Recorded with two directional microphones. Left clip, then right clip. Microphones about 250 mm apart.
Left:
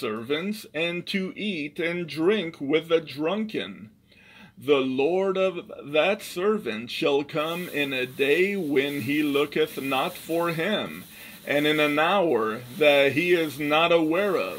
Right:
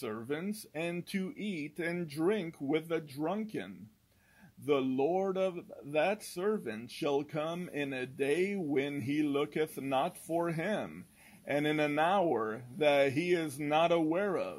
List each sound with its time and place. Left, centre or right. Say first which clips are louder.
0.0 s speech: left 10 dB; right
4.6 s speech: left 8 dB; right